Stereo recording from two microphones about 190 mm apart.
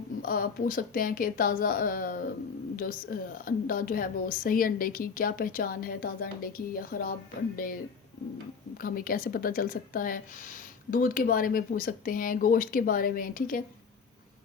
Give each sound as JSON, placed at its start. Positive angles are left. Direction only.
{"t": 0.2, "sound": "speech", "side_deg": 50}
{"t": 8.8, "sound": "speech", "side_deg": 50}